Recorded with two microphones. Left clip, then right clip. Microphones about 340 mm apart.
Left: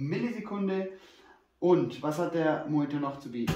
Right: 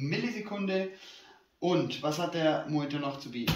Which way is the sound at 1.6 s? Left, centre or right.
Left.